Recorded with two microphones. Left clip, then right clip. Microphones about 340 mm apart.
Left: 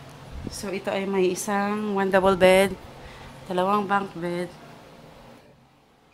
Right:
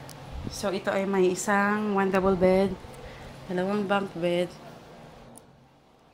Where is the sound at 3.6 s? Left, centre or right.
Centre.